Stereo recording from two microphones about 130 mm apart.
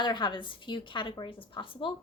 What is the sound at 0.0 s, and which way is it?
A woman's voice, 35° left (ahead or behind).